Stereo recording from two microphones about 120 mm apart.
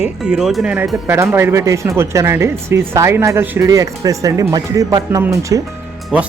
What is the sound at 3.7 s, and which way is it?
Speech, 30° right (ahead or behind).